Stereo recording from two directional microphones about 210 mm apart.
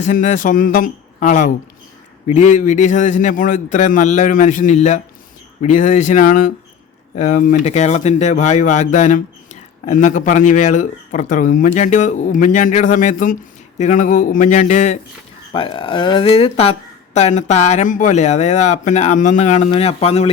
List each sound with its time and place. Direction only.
0.0 s speech: 35° left (ahead or behind)
15.5 s speech: 25° left (ahead or behind)